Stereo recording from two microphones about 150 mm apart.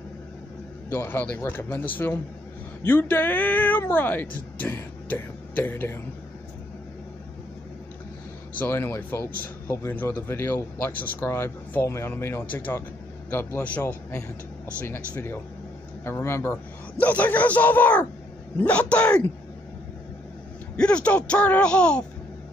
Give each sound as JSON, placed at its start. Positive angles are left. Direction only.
{"t": 0.8, "sound": "speech", "side_deg": 15}
{"t": 8.5, "sound": "speech", "side_deg": 15}
{"t": 20.7, "sound": "speech", "side_deg": 10}